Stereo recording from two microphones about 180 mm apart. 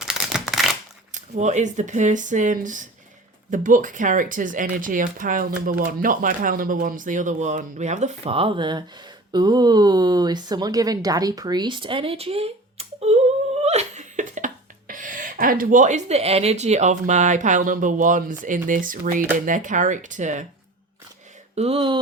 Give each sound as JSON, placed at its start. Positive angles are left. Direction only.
{"t": 0.0, "sound": "crumpling", "side_deg": 0}
{"t": 1.1, "sound": "speech", "side_deg": -40}
{"t": 13.6, "sound": "laughter", "side_deg": -40}
{"t": 19.5, "sound": "speech", "side_deg": -45}
{"t": 21.5, "sound": "speech", "side_deg": -35}